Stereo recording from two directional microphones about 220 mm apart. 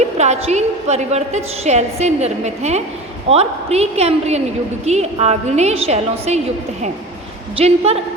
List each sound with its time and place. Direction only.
0.2 s a woman's voice: 30° right (ahead or behind)
7.5 s a woman's voice: 30° right (ahead or behind)